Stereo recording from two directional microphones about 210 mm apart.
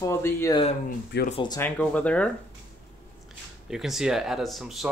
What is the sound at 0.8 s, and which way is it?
Speech, 40° left (ahead or behind).